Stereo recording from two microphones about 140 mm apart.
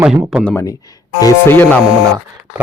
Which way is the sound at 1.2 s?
15° left (ahead or behind).